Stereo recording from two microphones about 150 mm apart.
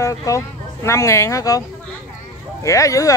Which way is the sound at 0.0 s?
20° left (ahead or behind).